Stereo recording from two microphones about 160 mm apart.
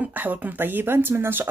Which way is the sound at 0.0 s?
10° right (ahead or behind).